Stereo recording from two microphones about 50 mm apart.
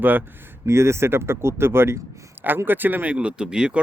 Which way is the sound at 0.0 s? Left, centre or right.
Right.